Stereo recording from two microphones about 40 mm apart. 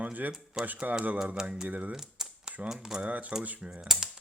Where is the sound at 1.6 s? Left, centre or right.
Right.